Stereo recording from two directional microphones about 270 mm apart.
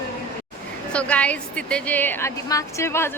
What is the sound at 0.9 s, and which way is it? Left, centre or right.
A woman's voice, centre.